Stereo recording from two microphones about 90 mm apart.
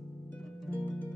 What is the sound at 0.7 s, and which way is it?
Music, 15° left (ahead or behind).